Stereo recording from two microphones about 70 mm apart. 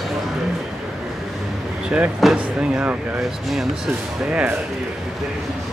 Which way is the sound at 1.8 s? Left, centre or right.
Centre.